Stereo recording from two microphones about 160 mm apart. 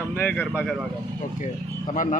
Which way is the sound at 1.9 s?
55° left (ahead or behind).